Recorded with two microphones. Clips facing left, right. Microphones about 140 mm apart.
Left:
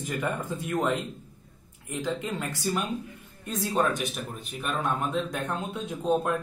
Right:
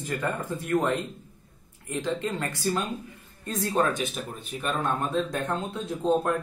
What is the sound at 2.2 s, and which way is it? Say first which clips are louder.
Speech: right 2 dB; 5° left (ahead or behind).